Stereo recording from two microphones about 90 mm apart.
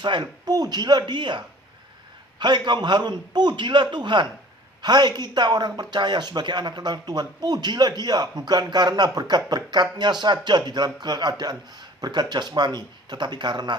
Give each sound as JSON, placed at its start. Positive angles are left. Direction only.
{"t": 0.0, "sound": "a man's voice", "side_deg": -60}